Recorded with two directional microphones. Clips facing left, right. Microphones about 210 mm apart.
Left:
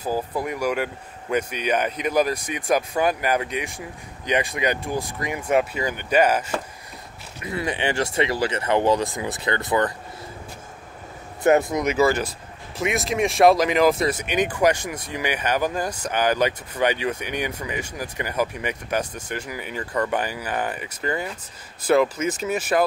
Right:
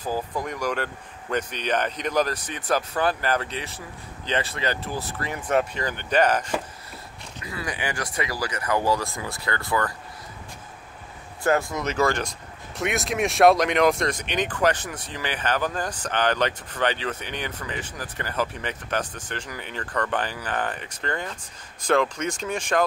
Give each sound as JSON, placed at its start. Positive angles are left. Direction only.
{"t": 0.0, "sound": "speech", "side_deg": 10}
{"t": 7.4, "sound": "speech", "side_deg": 25}
{"t": 11.4, "sound": "speech", "side_deg": 20}